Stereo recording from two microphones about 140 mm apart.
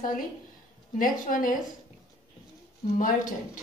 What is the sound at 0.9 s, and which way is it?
Speech, 75° left (ahead or behind).